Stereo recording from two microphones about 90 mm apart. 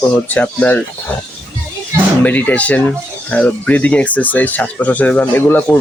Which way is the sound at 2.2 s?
20° left (ahead or behind).